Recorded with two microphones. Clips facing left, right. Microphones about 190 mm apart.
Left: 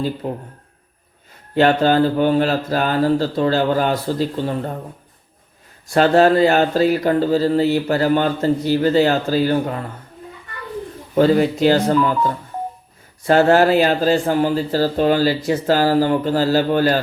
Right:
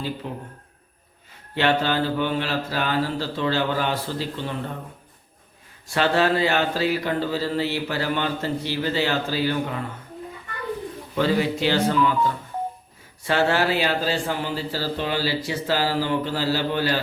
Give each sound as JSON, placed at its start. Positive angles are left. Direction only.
{"t": 0.2, "sound": "speech", "side_deg": 40}
{"t": 1.5, "sound": "speech", "side_deg": 45}
{"t": 5.9, "sound": "speech", "side_deg": 45}
{"t": 11.1, "sound": "speech", "side_deg": 45}